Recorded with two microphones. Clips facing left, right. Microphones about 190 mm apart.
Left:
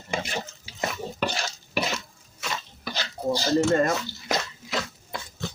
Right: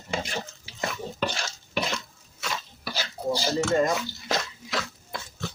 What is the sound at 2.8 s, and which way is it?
Dishes, 10° right (ahead or behind).